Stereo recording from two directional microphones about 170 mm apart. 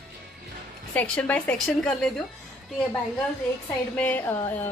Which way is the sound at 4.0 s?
10° left (ahead or behind).